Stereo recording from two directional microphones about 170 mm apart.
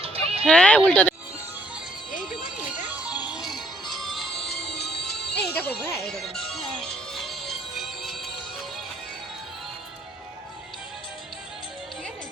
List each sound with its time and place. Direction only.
0.0 s music: 35° right (ahead or behind)
0.4 s speech: 5° left (ahead or behind)
2.9 s music: 10° right (ahead or behind)
4.6 s music: 75° left (ahead or behind)
6.0 s music: centre (ahead or behind)